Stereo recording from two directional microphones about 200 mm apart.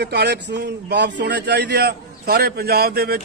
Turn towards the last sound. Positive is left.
turn(degrees=-50)  # may be behind; listen again after turning